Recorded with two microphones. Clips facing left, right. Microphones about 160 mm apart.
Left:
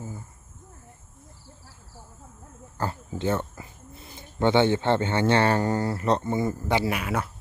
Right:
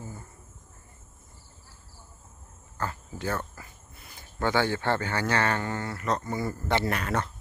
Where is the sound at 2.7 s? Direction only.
30° left (ahead or behind); by 7.3 s 10° left (ahead or behind).